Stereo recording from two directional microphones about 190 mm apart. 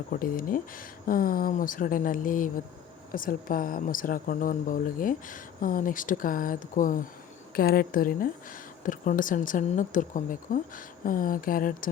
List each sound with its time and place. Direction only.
0.1 s speech: 50° left (ahead or behind)